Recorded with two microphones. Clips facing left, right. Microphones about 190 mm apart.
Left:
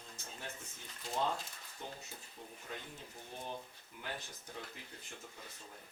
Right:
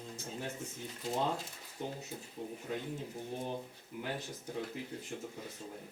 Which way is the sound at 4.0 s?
10° right (ahead or behind).